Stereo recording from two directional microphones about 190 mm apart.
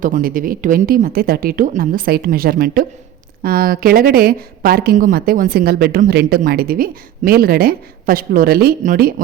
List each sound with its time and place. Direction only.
0.0 s speech: 45° right (ahead or behind)